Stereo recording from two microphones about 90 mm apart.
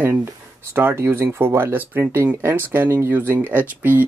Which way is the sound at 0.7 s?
30° right (ahead or behind).